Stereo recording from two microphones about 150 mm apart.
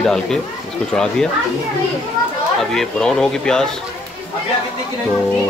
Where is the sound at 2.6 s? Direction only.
5° left (ahead or behind).